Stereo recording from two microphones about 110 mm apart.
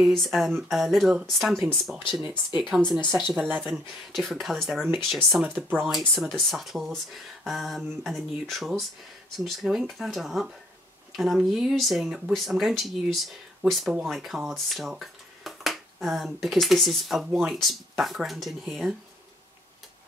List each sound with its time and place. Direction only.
0.0 s speech: centre (ahead or behind)
3.3 s speech: 15° right (ahead or behind)
3.6 s speech: centre (ahead or behind)
5.5 s speech: 10° right (ahead or behind)
5.9 s speech: centre (ahead or behind)